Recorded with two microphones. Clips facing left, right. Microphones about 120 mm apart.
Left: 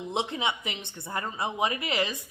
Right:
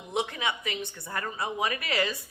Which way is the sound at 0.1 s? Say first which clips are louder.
Even; 25° left (ahead or behind).